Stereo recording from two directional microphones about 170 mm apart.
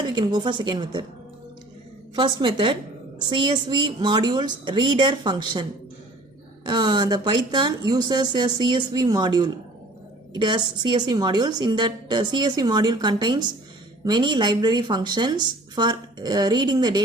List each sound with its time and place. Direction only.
0.1 s a woman's voice: 25° right (ahead or behind)
2.1 s a woman's voice: 30° right (ahead or behind)
6.7 s a woman's voice: 25° right (ahead or behind)